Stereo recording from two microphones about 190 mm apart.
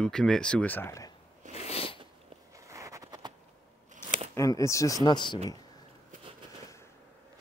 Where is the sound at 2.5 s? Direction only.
15° right (ahead or behind).